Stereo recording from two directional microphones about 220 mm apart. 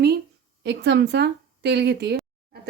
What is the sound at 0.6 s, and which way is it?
A woman's voice, 50° right (ahead or behind).